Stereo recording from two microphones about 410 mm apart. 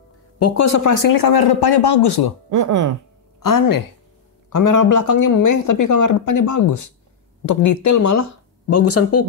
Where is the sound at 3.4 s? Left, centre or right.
Left.